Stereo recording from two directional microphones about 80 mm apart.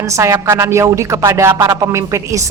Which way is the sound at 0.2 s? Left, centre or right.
Right.